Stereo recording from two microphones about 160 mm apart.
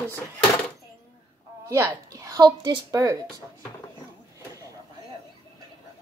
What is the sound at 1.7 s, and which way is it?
A woman's voice, 20° right (ahead or behind).